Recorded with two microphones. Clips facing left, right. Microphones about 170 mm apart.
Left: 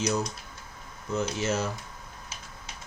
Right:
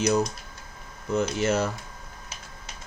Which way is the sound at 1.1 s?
60° right (ahead or behind).